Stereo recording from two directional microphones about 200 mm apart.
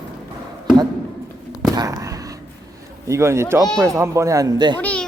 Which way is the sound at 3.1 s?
15° right (ahead or behind).